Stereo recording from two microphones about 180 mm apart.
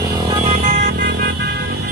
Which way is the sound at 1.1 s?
65° right (ahead or behind).